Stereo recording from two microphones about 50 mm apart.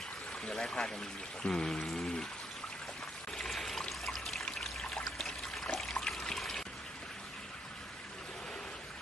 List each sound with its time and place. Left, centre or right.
0.4 s a sound: centre
3.3 s trickle: centre
5.7 s water: centre